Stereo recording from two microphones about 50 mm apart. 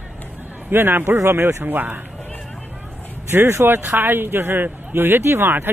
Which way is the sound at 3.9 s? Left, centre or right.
Right.